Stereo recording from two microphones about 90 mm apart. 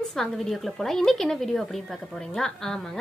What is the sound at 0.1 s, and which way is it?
A woman's voice, 5° left (ahead or behind).